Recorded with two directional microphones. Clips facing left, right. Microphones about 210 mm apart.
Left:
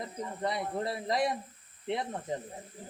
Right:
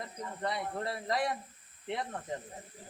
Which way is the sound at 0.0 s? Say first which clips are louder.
Left 3 dB; 20° left (ahead or behind).